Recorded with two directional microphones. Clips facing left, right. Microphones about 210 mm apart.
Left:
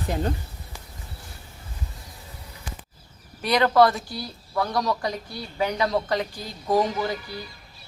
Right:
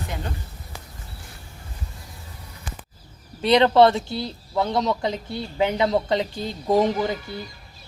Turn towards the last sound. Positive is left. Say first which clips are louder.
# right 3 dB
turn(degrees=-20)  # may be behind; listen again after turning